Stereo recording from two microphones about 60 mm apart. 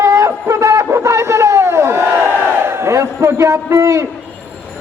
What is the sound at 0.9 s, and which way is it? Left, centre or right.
Crowd, right.